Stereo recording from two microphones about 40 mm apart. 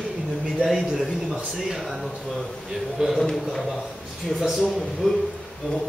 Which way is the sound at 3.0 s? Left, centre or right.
Centre.